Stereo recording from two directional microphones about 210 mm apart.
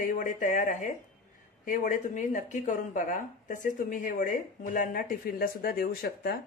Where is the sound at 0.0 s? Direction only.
40° left (ahead or behind).